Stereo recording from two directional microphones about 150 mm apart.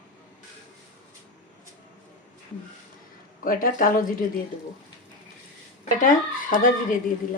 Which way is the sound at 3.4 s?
65° left (ahead or behind).